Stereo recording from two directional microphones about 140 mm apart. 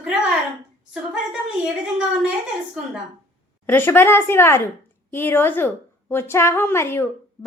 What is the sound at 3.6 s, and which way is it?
A woman's voice, 15° left (ahead or behind).